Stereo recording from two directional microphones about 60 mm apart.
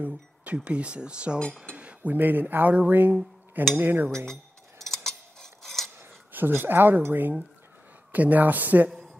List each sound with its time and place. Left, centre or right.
0.7 s speech: centre
1.8 s cutlery: right
2.1 s speech: right
4.8 s cutlery: centre
5.9 s a woman's voice: right